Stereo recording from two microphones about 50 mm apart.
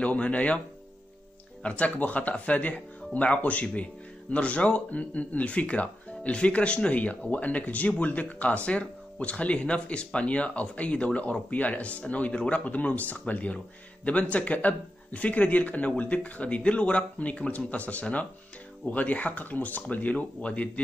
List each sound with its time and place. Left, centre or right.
0.0 s speech: left
1.6 s speech: left